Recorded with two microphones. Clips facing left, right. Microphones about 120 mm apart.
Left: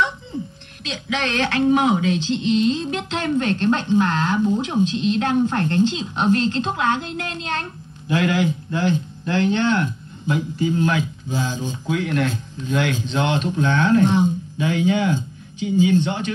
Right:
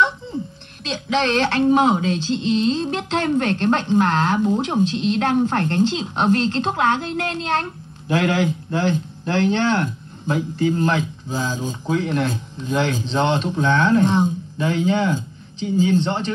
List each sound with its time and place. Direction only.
0.8 s a woman's voice: 50° right (ahead or behind)